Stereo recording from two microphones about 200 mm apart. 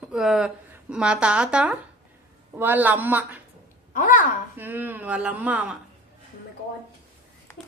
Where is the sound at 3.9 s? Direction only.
40° left (ahead or behind).